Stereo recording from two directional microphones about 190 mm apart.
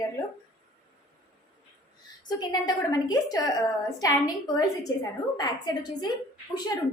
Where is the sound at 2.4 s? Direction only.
20° left (ahead or behind).